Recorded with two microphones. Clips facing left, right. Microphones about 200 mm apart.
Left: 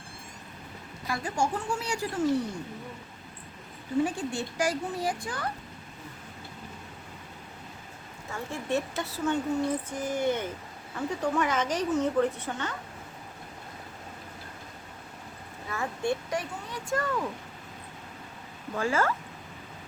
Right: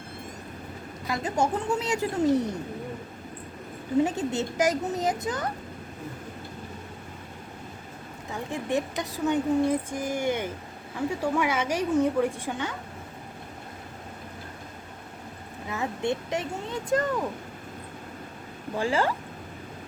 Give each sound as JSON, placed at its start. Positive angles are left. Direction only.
{"t": 1.0, "sound": "a child's voice", "side_deg": -20}
{"t": 4.0, "sound": "a child's voice", "side_deg": -20}
{"t": 8.3, "sound": "speech", "side_deg": -15}
{"t": 15.7, "sound": "a child's voice", "side_deg": -20}
{"t": 18.8, "sound": "speech", "side_deg": -30}